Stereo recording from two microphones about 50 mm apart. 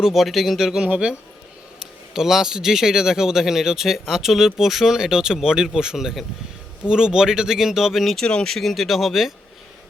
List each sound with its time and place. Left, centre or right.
0.0 s speech: centre
0.9 s a man's voice: right
2.1 s speech: centre
8.1 s speech: centre
8.5 s speech: centre